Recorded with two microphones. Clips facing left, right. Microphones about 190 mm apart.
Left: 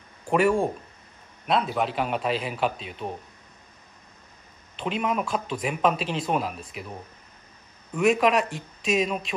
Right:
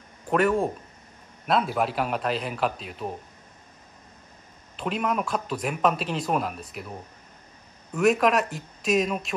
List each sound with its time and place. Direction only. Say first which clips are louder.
0.3 s speech: left 1 dB; centre (ahead or behind)
4.7 s speech: even; centre (ahead or behind)